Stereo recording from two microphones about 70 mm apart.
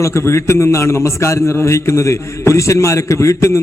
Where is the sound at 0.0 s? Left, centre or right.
Left.